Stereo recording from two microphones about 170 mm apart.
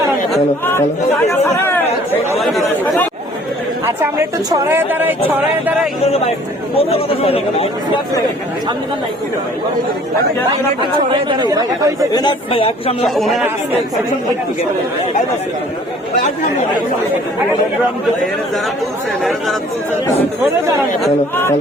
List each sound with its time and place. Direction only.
0.6 s speech: 15° left (ahead or behind)
3.8 s speech: 15° right (ahead or behind)
6.1 s speech: 35° left (ahead or behind)
11.1 s speech: 25° right (ahead or behind)
12.1 s speech: 30° left (ahead or behind)
13.1 s speech: centre (ahead or behind)
19.2 s speech: centre (ahead or behind)